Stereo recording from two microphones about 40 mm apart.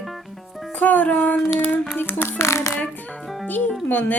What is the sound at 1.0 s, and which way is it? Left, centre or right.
Speech, left.